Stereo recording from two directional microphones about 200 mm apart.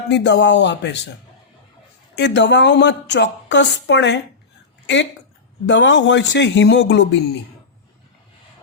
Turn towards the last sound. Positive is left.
turn(degrees=60)  # may be behind; listen again after turning